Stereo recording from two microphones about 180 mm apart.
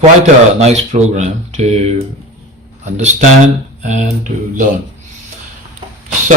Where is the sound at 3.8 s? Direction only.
40° right (ahead or behind).